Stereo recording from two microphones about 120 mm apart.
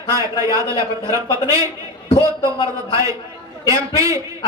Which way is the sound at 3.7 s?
25° right (ahead or behind).